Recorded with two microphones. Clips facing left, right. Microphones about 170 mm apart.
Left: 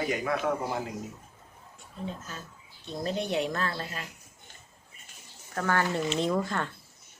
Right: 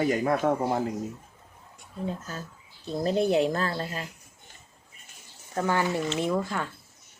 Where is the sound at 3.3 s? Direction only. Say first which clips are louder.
Right 5 dB; 35° right (ahead or behind).